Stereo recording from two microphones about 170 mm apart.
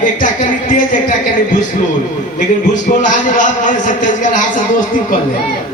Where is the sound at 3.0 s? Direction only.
50° left (ahead or behind).